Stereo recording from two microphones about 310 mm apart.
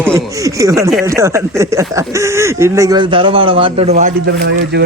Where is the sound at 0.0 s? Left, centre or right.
Centre.